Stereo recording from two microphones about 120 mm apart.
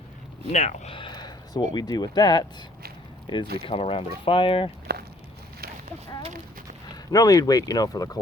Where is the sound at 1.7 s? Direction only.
35° left (ahead or behind).